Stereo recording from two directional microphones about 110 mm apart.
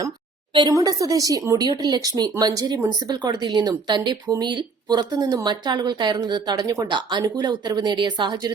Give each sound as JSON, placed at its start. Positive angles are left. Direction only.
{"t": 0.7, "sound": "a woman's voice", "side_deg": -30}